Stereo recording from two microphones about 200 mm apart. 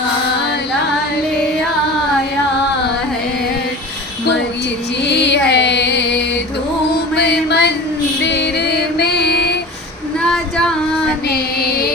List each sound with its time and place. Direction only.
5.0 s music: 55° left (ahead or behind)
7.2 s a sound: 55° left (ahead or behind)
8.2 s music: 60° left (ahead or behind)
11.3 s music: 50° left (ahead or behind)